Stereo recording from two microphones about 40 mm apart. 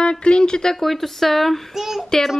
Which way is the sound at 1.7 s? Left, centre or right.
Centre.